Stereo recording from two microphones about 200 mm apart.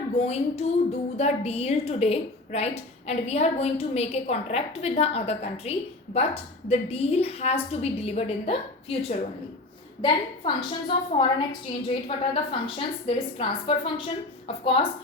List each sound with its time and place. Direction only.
0.2 s a woman's voice: 30° left (ahead or behind)